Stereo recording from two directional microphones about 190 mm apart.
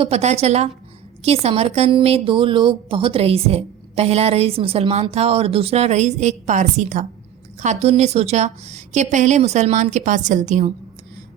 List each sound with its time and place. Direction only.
0.0 s a woman's voice: 35° right (ahead or behind)